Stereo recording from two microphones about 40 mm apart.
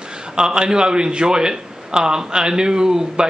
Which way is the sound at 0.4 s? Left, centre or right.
Centre.